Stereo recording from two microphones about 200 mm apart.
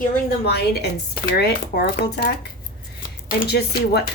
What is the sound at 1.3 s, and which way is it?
Speech, 50° left (ahead or behind).